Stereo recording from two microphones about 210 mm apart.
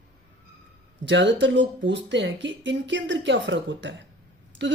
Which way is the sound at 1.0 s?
60° right (ahead or behind).